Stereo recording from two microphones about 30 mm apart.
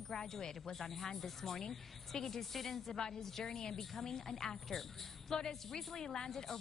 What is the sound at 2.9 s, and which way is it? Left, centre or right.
A woman's voice, left.